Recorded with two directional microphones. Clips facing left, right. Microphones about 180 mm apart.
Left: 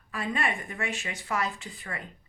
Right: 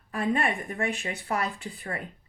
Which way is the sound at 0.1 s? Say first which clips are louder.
Right 4 dB; 35° right (ahead or behind).